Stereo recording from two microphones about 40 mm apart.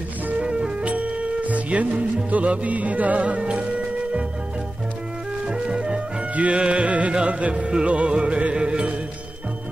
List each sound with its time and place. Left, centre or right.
0.4 s music: right
0.8 s music: right
5.5 s music: right
6.3 s music: right